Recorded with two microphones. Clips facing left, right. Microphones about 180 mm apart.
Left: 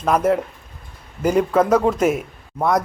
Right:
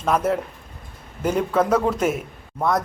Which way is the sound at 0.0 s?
5° left (ahead or behind).